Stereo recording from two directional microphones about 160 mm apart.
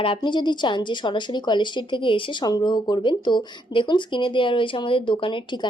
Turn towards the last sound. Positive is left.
turn(degrees=30)  # may be behind; listen again after turning